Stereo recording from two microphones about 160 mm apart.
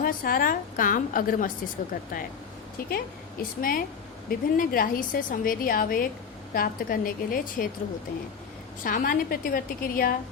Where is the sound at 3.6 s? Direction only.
60° left (ahead or behind).